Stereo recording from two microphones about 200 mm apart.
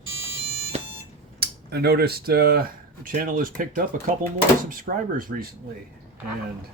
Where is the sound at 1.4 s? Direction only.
55° right (ahead or behind).